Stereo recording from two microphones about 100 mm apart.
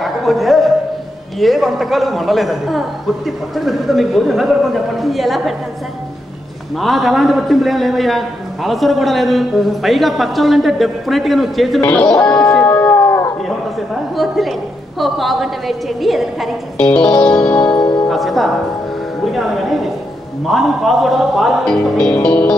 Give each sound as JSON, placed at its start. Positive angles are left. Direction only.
{"t": 0.0, "sound": "a man's voice", "side_deg": 0}
{"t": 6.8, "sound": "a man's voice", "side_deg": 0}
{"t": 11.8, "sound": "music", "side_deg": 15}
{"t": 13.5, "sound": "a sound", "side_deg": 0}
{"t": 15.0, "sound": "a man's voice", "side_deg": 0}
{"t": 16.7, "sound": "music", "side_deg": 15}
{"t": 17.6, "sound": "music", "side_deg": 45}
{"t": 18.0, "sound": "music", "side_deg": 0}
{"t": 19.2, "sound": "a man's voice", "side_deg": 0}
{"t": 22.1, "sound": "music", "side_deg": 15}